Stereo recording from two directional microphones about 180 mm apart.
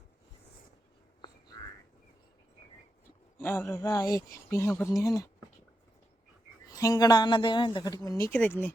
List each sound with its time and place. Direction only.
3.4 s speech: 10° left (ahead or behind)
6.7 s speech: 20° left (ahead or behind)